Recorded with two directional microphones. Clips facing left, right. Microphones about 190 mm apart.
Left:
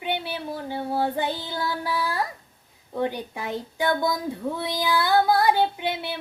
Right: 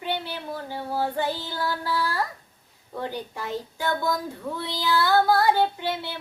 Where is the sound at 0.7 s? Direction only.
20° left (ahead or behind).